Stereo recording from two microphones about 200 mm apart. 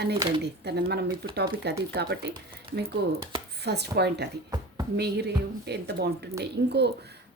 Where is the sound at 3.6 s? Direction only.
55° right (ahead or behind).